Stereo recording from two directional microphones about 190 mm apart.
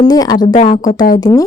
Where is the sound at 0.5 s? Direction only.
40° left (ahead or behind).